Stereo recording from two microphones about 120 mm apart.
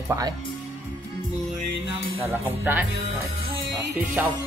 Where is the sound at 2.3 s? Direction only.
15° right (ahead or behind).